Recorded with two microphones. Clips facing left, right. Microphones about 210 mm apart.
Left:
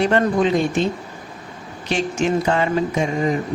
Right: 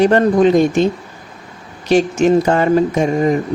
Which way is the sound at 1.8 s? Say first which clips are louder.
Right 8 dB; 40° right (ahead or behind).